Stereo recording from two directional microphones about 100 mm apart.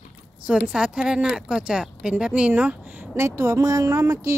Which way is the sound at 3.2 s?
30° right (ahead or behind).